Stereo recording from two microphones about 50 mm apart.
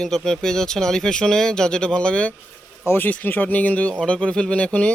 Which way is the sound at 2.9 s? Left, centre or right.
Left.